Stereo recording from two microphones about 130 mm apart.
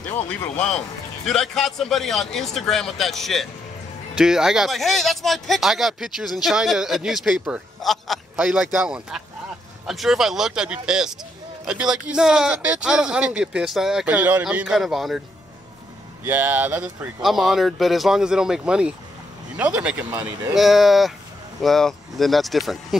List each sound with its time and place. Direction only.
0.3 s speech: 10° left (ahead or behind)
16.3 s speech: 15° right (ahead or behind)